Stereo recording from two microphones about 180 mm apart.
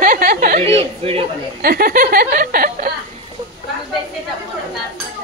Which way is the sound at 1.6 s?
55° right (ahead or behind).